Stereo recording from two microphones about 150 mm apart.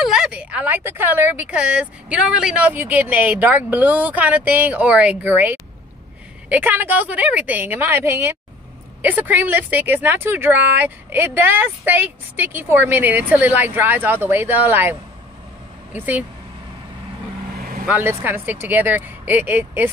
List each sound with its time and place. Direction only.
0.0 s speech: 5° right (ahead or behind)
17.6 s vehicle: 75° right (ahead or behind)
17.8 s speech: 10° right (ahead or behind)